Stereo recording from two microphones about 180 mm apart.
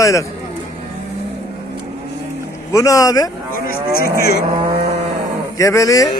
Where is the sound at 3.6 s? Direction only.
60° left (ahead or behind).